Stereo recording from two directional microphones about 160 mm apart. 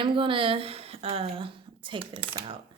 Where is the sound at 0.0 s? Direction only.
30° right (ahead or behind).